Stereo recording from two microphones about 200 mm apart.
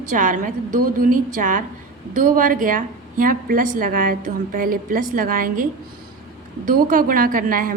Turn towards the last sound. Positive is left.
turn(degrees=-45)  # may be behind; listen again after turning